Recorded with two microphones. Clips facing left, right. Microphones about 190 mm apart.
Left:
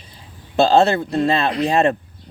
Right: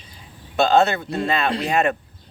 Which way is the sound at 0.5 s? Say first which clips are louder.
Left 3 dB; 30° left (ahead or behind).